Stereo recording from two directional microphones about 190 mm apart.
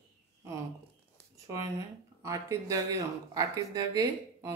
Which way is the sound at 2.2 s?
15° right (ahead or behind).